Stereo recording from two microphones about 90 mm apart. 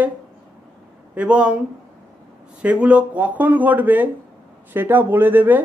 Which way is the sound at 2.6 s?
15° right (ahead or behind).